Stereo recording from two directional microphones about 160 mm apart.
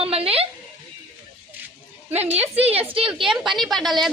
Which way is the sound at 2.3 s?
40° right (ahead or behind).